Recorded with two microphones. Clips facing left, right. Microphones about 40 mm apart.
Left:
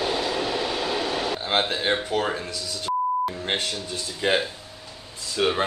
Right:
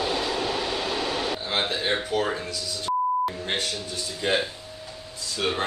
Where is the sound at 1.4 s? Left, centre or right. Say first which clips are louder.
Left 4 dB; left.